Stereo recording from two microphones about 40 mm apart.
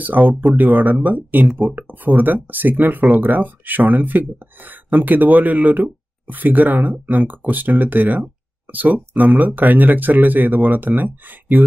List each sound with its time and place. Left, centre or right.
0.0 s speech: right